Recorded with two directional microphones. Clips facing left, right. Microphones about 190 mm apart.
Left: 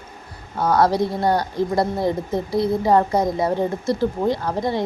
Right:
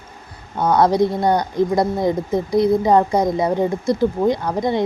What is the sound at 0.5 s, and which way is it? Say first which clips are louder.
Speech: right 2 dB; 20° right (ahead or behind).